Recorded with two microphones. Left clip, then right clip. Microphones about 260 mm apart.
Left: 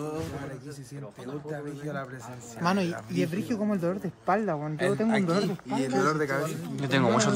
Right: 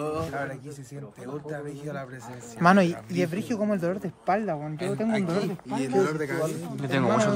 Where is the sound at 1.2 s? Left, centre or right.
Centre.